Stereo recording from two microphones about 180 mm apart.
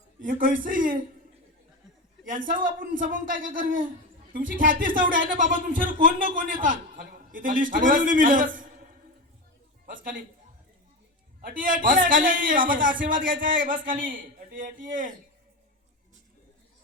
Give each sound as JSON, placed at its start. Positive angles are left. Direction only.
{"t": 0.2, "sound": "speech", "side_deg": -50}
{"t": 2.6, "sound": "a man's voice", "side_deg": -50}
{"t": 11.3, "sound": "speech", "side_deg": -50}